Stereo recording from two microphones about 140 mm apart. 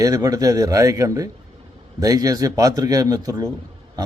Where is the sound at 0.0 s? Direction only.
25° right (ahead or behind).